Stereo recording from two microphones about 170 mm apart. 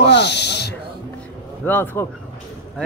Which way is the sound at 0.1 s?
85° left.